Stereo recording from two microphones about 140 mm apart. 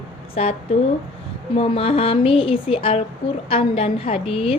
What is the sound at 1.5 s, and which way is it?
A woman's voice, 45° left (ahead or behind).